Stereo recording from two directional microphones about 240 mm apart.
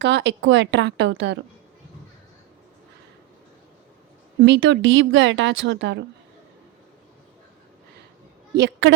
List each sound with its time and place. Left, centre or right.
0.0 s speech: right
4.4 s speech: right
8.5 s a woman's voice: right